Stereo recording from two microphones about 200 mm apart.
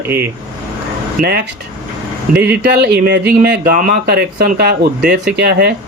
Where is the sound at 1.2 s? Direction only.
50° right (ahead or behind).